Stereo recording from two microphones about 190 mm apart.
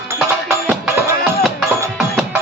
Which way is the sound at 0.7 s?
5° right (ahead or behind).